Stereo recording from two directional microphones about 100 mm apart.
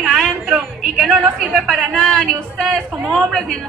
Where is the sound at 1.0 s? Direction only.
10° right (ahead or behind); by 2.2 s 5° left (ahead or behind).